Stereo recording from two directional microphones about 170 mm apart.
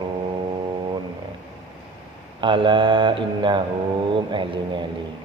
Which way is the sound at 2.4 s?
30° right (ahead or behind).